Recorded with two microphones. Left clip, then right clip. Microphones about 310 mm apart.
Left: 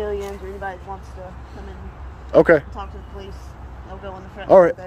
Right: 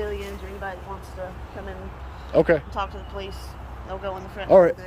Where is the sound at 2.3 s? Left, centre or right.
Centre.